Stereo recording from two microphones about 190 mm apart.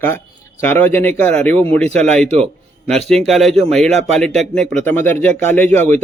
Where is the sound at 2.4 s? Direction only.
5° left (ahead or behind).